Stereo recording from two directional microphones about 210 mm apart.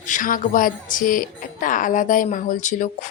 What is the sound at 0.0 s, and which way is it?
A woman's voice, 40° left (ahead or behind).